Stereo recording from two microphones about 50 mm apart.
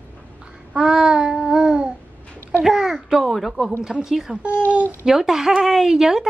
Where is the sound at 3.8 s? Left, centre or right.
Centre.